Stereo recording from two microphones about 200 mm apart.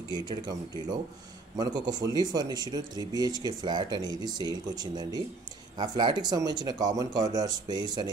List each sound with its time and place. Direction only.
0.1 s speech: 20° right (ahead or behind)